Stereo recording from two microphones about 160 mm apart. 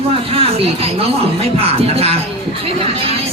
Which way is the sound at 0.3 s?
40° right (ahead or behind).